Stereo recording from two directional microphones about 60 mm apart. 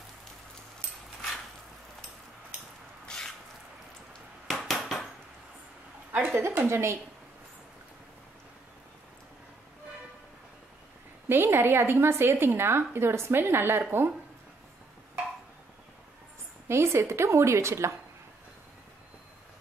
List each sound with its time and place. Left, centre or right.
3.1 s a sound: centre
4.5 s a sound: centre
6.1 s a woman's voice: right
6.7 s a woman's voice: right
11.2 s a woman's voice: right
16.6 s a woman's voice: right